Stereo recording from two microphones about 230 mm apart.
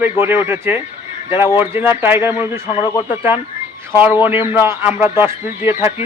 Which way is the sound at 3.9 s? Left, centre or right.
Centre.